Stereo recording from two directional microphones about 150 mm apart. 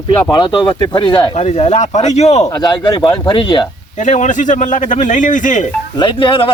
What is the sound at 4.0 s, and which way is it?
A man's voice, 55° left (ahead or behind).